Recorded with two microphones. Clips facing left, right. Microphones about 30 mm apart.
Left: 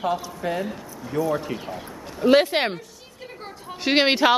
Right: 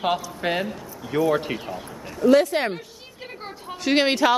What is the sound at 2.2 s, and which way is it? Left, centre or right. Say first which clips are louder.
Speech: even; left.